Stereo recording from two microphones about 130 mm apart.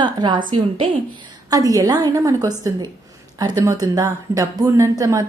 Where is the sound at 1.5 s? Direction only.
30° right (ahead or behind).